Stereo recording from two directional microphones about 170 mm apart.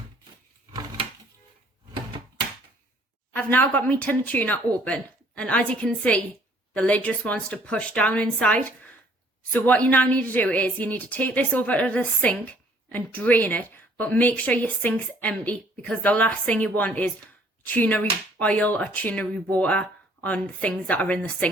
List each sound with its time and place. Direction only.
0.7 s drawer open or close: 25° right (ahead or behind)
3.3 s a woman's voice: 10° left (ahead or behind)